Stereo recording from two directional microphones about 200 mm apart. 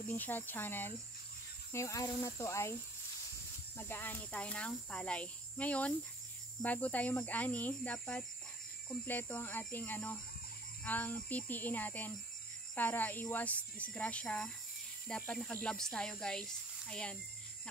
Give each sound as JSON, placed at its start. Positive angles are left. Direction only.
{"t": 0.1, "sound": "speech", "side_deg": 10}
{"t": 3.7, "sound": "speech", "side_deg": 10}